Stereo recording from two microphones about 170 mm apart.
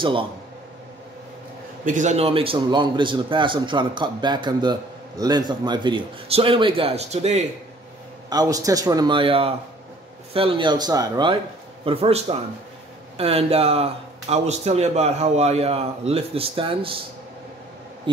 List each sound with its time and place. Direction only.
0.0 s speech: 30° right (ahead or behind)
1.9 s a man's voice: 45° right (ahead or behind)
8.3 s a man's voice: 20° right (ahead or behind)
11.8 s speech: 35° right (ahead or behind)
18.1 s a man's voice: 30° right (ahead or behind)